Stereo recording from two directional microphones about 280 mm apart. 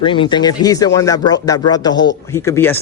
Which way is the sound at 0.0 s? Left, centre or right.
Centre.